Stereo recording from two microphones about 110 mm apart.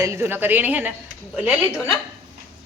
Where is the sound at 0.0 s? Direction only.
25° right (ahead or behind).